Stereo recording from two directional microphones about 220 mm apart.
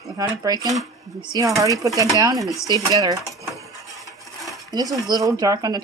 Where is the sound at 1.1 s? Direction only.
15° right (ahead or behind).